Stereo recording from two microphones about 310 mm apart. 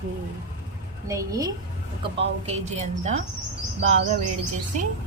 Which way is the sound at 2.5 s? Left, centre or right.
Right.